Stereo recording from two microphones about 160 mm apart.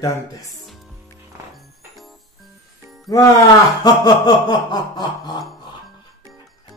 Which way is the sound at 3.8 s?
25° left (ahead or behind).